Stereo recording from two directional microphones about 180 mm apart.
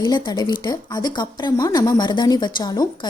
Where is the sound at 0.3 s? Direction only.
25° left (ahead or behind).